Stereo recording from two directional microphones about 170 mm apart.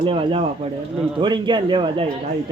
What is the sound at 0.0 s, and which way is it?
Speech, 30° right (ahead or behind).